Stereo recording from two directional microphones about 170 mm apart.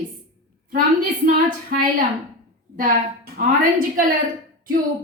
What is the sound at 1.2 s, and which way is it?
Speech, 55° right (ahead or behind).